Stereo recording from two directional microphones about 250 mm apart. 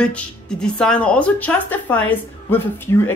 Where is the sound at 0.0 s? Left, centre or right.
Centre.